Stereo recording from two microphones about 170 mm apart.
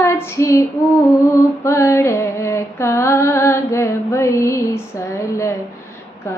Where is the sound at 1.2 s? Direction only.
15° left (ahead or behind).